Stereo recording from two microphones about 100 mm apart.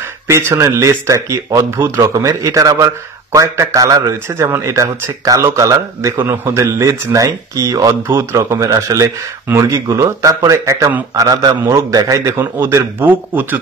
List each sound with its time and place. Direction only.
0.0 s a man's voice: 25° right (ahead or behind)